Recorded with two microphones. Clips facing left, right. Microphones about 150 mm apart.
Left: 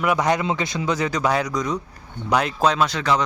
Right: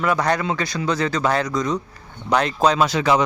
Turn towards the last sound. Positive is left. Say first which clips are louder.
# right 3 dB
turn(degrees=-10)  # may be behind; listen again after turning